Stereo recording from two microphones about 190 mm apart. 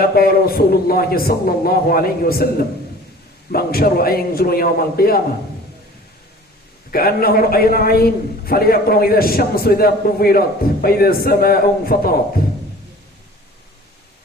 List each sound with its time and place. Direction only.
0.0 s a man's voice: 50° left (ahead or behind)
6.9 s a man's voice: 50° left (ahead or behind)